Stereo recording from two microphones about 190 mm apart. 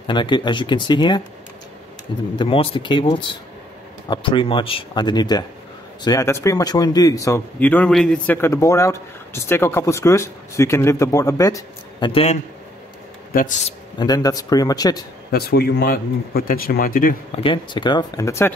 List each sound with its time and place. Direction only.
0.0 s speech: 25° left (ahead or behind)
2.3 s a man's voice: 25° left (ahead or behind)
12.1 s a man's voice: 30° left (ahead or behind)
13.3 s speech: 45° left (ahead or behind)
13.9 s speech: 20° left (ahead or behind)
15.3 s speech: 55° left (ahead or behind)
17.4 s speech: 25° left (ahead or behind)